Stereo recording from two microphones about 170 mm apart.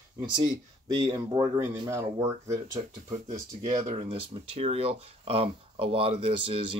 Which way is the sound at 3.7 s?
35° right (ahead or behind).